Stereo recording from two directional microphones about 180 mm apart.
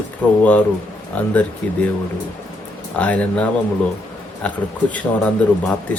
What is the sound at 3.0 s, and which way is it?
Speech, 10° left (ahead or behind).